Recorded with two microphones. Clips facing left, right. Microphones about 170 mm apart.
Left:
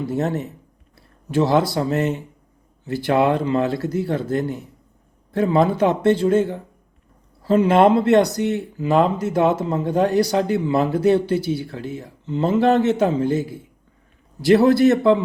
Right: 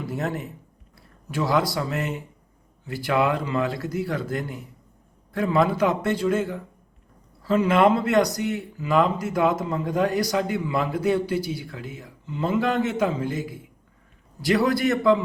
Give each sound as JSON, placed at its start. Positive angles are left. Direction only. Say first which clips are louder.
{"t": 0.0, "sound": "speech", "louder": "left 6 dB", "side_deg": 25}